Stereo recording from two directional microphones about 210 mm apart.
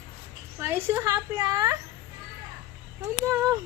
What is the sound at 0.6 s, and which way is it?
A woman's voice, 10° right (ahead or behind).